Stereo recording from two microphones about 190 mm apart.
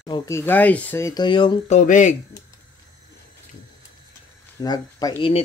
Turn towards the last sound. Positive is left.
turn(degrees=20)  # may be behind; listen again after turning